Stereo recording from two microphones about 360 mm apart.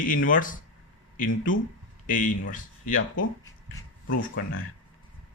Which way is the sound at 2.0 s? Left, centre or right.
Left.